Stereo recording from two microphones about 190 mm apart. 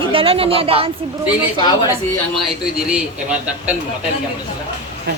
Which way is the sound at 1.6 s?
20° left (ahead or behind).